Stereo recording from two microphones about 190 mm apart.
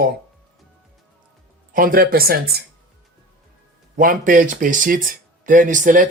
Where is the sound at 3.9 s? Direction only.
45° right (ahead or behind).